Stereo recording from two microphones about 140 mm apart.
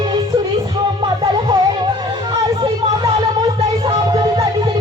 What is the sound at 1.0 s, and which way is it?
Music, 30° right (ahead or behind).